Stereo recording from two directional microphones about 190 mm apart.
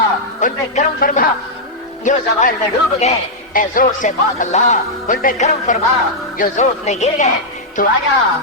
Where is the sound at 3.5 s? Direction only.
45° left (ahead or behind).